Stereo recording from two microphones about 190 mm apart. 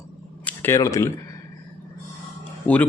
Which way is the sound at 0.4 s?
10° left (ahead or behind).